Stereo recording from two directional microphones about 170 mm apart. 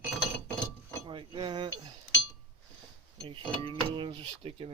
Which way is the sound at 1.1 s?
30° right (ahead or behind).